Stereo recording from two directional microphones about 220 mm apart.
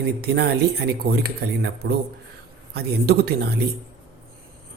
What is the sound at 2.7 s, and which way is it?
Speech, 45° right (ahead or behind).